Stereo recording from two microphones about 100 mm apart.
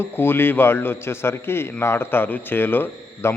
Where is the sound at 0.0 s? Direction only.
20° left (ahead or behind).